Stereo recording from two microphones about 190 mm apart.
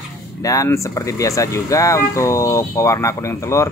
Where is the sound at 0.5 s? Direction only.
15° left (ahead or behind).